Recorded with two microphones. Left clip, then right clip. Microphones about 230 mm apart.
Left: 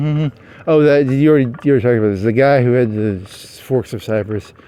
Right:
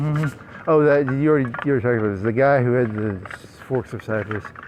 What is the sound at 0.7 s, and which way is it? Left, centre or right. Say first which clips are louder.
Speech: left 5 dB; left.